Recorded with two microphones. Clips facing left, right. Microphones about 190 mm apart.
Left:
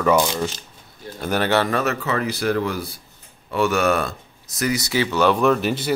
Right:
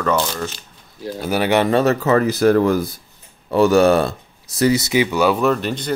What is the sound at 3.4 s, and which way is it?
Speech, 35° right (ahead or behind).